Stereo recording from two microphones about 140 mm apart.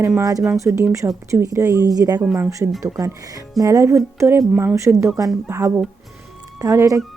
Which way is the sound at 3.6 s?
20° right (ahead or behind).